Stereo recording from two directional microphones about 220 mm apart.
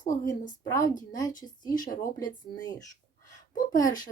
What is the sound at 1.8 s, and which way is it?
Speech, 40° left (ahead or behind).